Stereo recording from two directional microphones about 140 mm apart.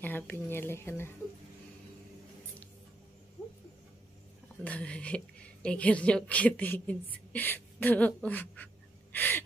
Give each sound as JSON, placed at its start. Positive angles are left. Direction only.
{"t": 0.0, "sound": "a woman's voice", "side_deg": 15}
{"t": 4.6, "sound": "a woman's voice", "side_deg": 10}
{"t": 9.1, "sound": "gasp", "side_deg": 15}